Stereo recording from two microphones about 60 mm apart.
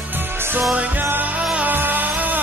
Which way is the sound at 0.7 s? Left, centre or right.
Right.